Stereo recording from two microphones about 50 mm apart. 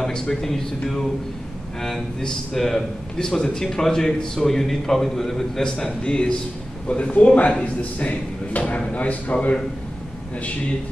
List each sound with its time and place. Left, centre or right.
0.0 s speech: centre; by 9.6 s left